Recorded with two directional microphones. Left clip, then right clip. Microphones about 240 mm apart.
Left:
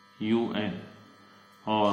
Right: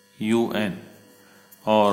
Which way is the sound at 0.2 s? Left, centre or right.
Right.